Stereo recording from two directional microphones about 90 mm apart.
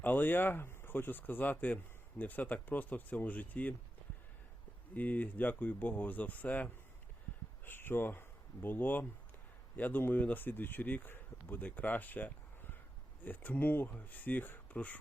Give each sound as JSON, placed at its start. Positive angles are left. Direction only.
{"t": 0.0, "sound": "speech", "side_deg": 20}
{"t": 4.9, "sound": "speech", "side_deg": 20}